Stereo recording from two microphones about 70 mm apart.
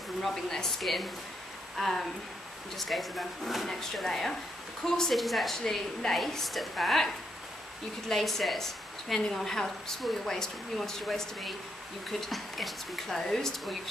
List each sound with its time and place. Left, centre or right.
0.2 s a woman's voice: centre